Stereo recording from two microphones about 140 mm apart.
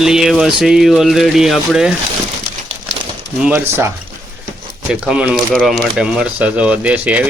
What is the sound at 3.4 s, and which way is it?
Speech, 15° right (ahead or behind).